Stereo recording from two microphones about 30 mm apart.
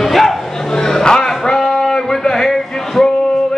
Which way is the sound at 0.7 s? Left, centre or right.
Centre.